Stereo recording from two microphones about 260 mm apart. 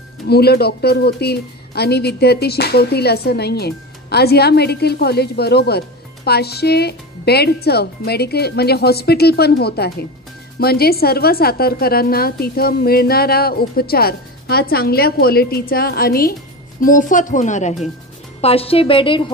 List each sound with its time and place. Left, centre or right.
0.3 s a woman's voice: left; by 19.2 s centre